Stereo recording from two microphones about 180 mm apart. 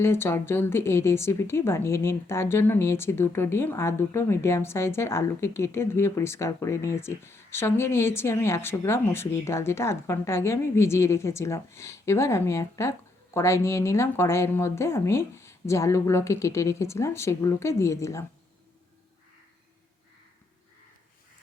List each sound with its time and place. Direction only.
0.0 s a woman's voice: 15° left (ahead or behind)